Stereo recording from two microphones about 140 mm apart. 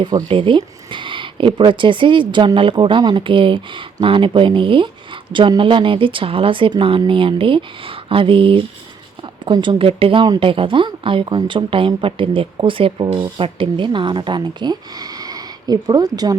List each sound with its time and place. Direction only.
0.0 s speech: 35° right (ahead or behind)